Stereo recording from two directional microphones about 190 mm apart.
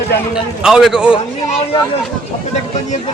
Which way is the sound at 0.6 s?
5° right (ahead or behind).